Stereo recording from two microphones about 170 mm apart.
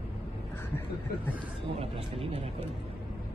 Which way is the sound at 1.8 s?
35° right (ahead or behind).